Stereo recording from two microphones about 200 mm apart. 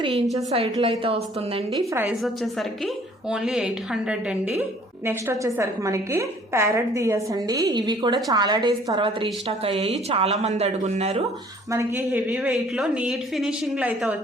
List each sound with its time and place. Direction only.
0.3 s a woman's voice: 30° right (ahead or behind)
1.9 s a woman's voice: 10° right (ahead or behind)
2.2 s a woman's voice: centre (ahead or behind); by 11.3 s 30° right (ahead or behind)
11.7 s a woman's voice: 15° right (ahead or behind)